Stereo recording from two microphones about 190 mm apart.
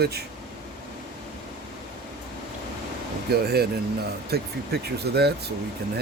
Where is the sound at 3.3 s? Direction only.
55° right (ahead or behind).